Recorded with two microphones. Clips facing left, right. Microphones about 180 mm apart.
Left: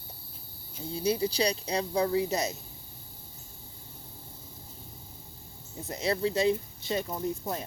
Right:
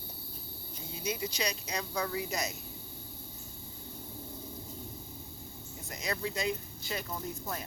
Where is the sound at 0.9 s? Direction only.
35° left (ahead or behind).